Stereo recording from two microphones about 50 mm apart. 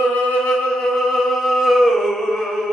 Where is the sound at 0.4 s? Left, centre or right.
Centre.